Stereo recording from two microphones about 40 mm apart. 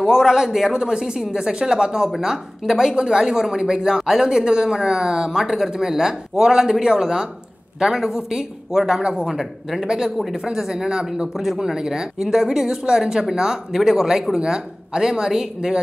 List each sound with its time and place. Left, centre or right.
0.0 s speech: centre
9.3 s speech: centre
9.8 s speech: centre
11.3 s speech: centre
11.7 s speech: centre